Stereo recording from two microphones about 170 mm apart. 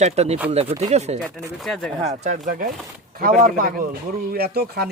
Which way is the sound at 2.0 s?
45° right (ahead or behind).